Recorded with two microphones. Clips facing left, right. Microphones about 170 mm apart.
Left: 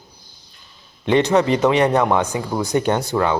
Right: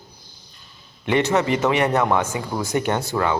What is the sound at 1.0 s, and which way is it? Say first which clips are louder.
Speech: left 4 dB; 20° left (ahead or behind).